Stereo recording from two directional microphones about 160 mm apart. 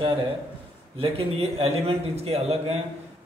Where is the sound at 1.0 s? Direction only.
35° right (ahead or behind).